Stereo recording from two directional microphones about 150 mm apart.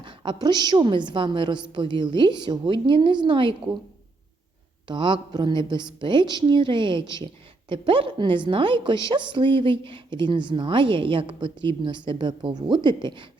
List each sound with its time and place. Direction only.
0.0 s a woman's voice: 30° right (ahead or behind)
4.9 s a woman's voice: 30° right (ahead or behind)